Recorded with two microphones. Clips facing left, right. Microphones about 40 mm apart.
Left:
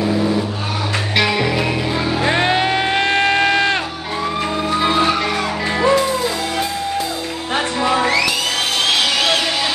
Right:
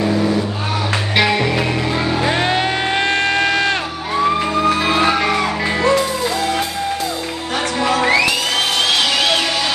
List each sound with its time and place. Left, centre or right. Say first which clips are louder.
0.0 s vehicle: right 1 dB; centre
1.1 s music: right 1 dB; centre
2.2 s music: left 3 dB; centre
4.9 s music: right 1 dB; right
5.8 s music: left 1 dB; centre
7.5 s music: even; left
8.8 s music: left 2 dB; centre